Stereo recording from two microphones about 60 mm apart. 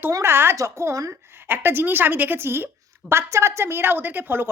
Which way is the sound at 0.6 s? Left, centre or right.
Right.